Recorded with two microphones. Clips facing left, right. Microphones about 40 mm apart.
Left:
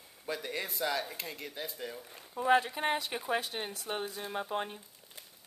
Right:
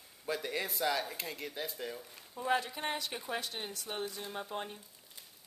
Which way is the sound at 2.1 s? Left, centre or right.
Left.